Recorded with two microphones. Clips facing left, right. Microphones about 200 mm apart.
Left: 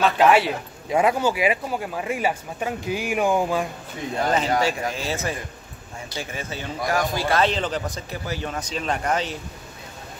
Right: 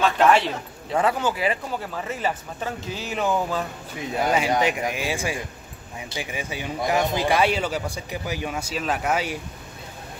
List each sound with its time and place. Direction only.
0.0 s speech: 5° left (ahead or behind)
4.2 s speech: 10° right (ahead or behind)